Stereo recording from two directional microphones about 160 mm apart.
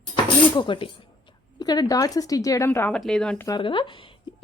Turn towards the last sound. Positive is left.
turn(degrees=30)  # may be behind; listen again after turning